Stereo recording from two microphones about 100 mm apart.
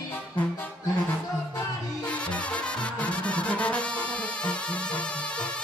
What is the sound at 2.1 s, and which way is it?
Music, 10° left (ahead or behind).